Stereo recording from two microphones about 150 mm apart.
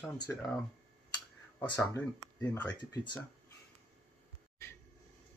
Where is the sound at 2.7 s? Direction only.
30° left (ahead or behind).